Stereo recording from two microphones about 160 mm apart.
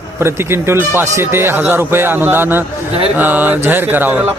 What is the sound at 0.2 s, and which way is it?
Speech, 15° right (ahead or behind).